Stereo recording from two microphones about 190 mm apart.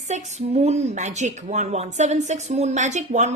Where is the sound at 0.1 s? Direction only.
35° right (ahead or behind).